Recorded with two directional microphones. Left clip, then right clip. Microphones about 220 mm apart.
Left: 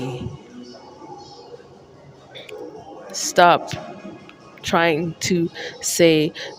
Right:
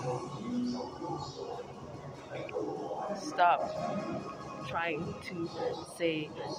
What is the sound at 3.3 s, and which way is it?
Speech, 50° left (ahead or behind).